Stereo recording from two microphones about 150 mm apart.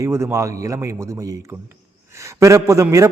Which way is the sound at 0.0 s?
20° right (ahead or behind).